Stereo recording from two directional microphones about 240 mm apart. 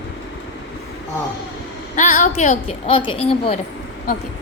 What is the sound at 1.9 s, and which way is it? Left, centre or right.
A woman's voice, left.